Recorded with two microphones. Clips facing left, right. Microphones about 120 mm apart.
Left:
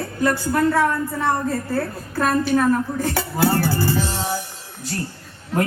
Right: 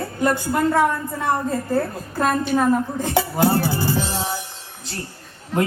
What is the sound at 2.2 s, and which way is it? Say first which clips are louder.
A woman's voice: left 1 dB; 20° right (ahead or behind).